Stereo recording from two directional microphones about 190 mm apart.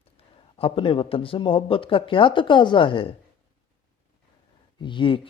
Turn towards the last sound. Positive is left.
turn(degrees=25)  # may be behind; listen again after turning